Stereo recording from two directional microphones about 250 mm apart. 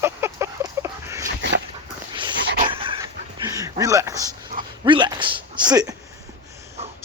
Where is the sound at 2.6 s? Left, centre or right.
Right.